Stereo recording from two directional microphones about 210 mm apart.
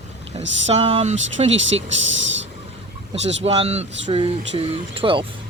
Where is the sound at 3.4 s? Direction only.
25° right (ahead or behind).